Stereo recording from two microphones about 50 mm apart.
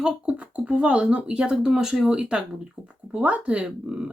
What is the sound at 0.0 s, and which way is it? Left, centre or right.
Speech, right.